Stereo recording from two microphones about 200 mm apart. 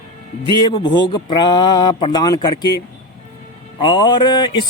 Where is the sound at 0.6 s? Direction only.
20° left (ahead or behind).